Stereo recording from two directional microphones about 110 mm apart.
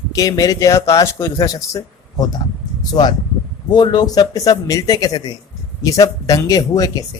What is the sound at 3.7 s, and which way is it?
A man's voice, 40° left (ahead or behind).